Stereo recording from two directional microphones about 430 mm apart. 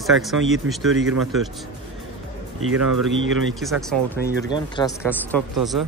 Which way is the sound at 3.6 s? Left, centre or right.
Centre.